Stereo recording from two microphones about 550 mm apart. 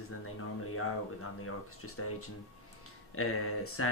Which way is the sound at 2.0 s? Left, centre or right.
Left.